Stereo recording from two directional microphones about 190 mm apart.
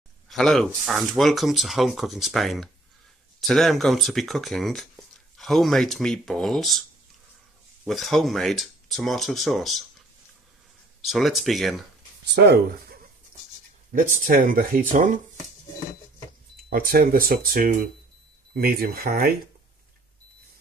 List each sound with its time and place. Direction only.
0.3 s speech: centre (ahead or behind)
7.8 s speech: centre (ahead or behind)
11.0 s speech: centre (ahead or behind)
12.3 s speech: 55° right (ahead or behind)
14.0 s speech: 45° right (ahead or behind)
16.6 s speech: 50° right (ahead or behind)